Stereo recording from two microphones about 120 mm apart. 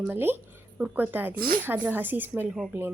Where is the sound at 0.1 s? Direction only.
15° right (ahead or behind).